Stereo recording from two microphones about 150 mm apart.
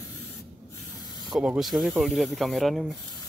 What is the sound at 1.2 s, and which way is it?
Speech, 5° right (ahead or behind).